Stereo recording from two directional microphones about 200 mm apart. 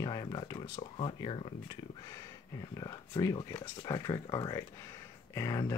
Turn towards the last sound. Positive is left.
turn(degrees=15)  # may be behind; listen again after turning